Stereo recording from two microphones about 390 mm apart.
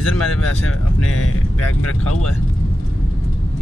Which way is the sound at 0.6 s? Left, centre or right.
Left.